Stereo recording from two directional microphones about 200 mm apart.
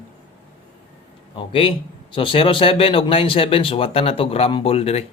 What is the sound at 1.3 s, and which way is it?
Speech, 25° left (ahead or behind).